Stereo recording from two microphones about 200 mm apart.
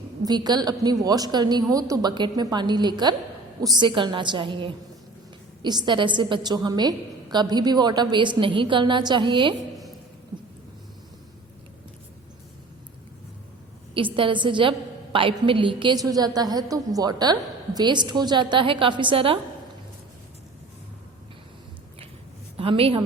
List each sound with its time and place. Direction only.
0.3 s a woman's voice: 20° right (ahead or behind)
13.9 s a woman's voice: 25° right (ahead or behind)
22.5 s a woman's voice: 30° right (ahead or behind)